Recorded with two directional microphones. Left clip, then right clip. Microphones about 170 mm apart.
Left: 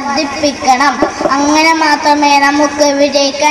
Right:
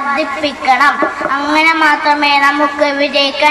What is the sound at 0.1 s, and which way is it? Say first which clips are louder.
A woman's voice: left 2 dB; 30° left (ahead or behind).